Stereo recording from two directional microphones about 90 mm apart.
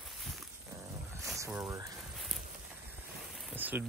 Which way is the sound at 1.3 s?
30° right (ahead or behind).